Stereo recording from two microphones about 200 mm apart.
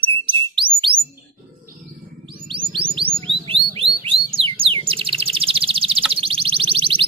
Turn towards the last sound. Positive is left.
turn(degrees=-25)  # may be behind; listen again after turning